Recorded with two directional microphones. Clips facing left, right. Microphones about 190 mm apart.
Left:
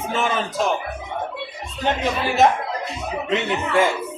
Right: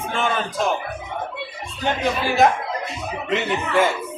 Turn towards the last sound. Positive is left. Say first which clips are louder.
# even
turn(degrees=0)  # may be behind; listen again after turning